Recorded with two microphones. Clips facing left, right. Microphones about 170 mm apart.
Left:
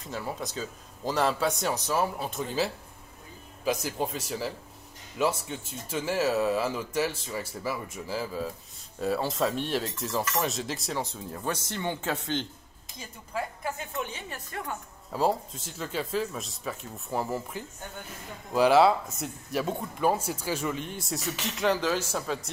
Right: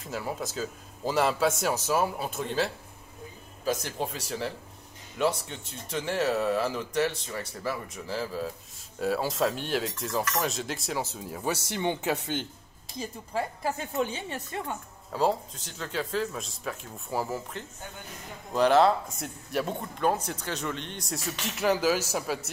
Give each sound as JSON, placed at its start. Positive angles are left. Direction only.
{"t": 0.0, "sound": "speech", "side_deg": -5}
{"t": 3.8, "sound": "speech", "side_deg": 0}
{"t": 11.7, "sound": "speech", "side_deg": -15}
{"t": 13.0, "sound": "speech", "side_deg": -35}
{"t": 15.1, "sound": "speech", "side_deg": 5}